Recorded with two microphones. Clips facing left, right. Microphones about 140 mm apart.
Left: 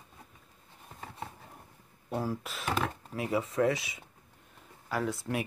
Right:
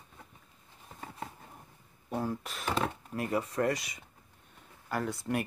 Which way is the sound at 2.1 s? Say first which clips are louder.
Even; 5° left (ahead or behind).